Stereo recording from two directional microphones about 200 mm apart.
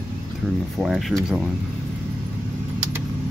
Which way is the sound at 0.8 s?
Centre (ahead or behind).